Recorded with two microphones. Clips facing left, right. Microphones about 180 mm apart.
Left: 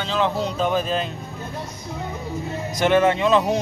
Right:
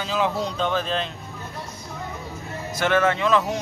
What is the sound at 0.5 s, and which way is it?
Speech, 10° left (ahead or behind).